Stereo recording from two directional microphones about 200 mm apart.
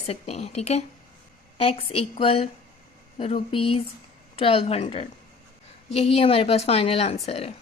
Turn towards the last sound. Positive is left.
turn(degrees=30)  # may be behind; listen again after turning